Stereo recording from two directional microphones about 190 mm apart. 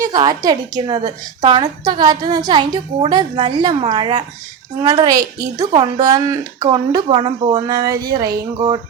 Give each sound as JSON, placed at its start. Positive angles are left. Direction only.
{"t": 0.0, "sound": "a woman's voice", "side_deg": -20}